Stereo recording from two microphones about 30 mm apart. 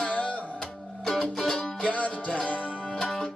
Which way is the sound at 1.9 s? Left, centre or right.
Left.